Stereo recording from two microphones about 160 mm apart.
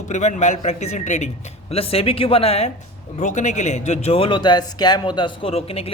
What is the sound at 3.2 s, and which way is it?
Speech, 50° left (ahead or behind).